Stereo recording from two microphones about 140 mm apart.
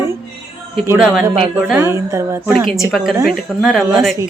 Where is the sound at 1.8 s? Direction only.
20° right (ahead or behind).